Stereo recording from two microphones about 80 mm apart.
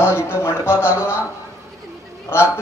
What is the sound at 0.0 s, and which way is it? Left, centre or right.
Speech, left.